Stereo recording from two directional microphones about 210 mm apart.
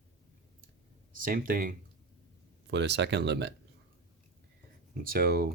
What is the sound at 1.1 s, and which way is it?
Speech, 40° right (ahead or behind).